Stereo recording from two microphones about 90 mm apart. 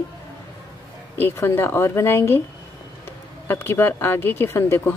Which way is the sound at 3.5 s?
25° left (ahead or behind).